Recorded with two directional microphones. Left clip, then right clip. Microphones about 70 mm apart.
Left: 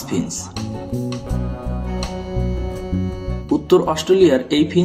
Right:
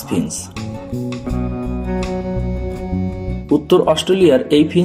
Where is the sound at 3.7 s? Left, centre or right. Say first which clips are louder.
Right 1 dB; right.